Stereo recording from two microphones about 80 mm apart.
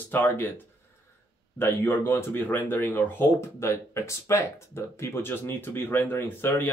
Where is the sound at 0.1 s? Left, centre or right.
Left.